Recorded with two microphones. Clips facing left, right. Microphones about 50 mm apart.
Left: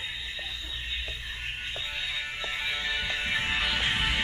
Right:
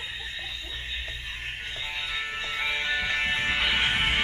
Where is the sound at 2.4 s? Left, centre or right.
Right.